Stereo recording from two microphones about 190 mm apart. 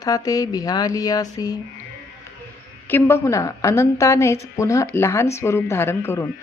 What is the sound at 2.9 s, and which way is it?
A woman's voice, 15° left (ahead or behind).